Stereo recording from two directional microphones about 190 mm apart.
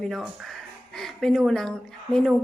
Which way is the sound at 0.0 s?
Centre (ahead or behind).